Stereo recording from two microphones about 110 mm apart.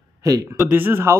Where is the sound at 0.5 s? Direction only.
20° right (ahead or behind).